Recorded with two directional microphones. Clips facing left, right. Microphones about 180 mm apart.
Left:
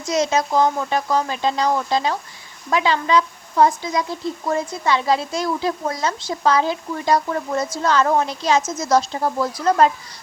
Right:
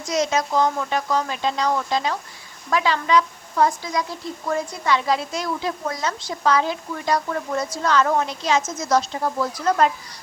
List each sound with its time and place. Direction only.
0.1 s a woman's voice: 30° left (ahead or behind)